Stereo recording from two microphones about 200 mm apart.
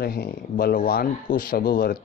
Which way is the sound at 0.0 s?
50° left (ahead or behind).